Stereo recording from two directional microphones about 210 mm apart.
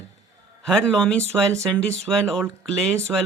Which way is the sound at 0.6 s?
5° left (ahead or behind).